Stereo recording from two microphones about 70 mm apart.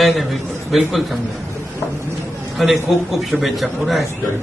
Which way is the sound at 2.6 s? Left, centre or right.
Centre.